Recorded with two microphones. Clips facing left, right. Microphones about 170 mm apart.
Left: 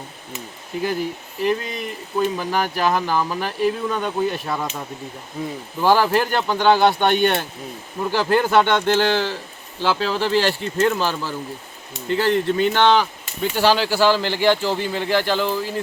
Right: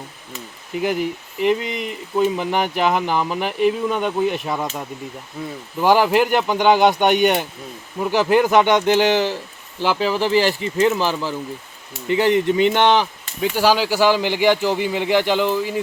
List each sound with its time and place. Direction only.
0.8 s speech: 15° right (ahead or behind)
5.8 s speech: 15° right (ahead or behind)